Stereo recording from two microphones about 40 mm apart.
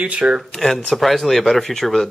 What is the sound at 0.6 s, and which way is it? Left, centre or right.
Speech, centre.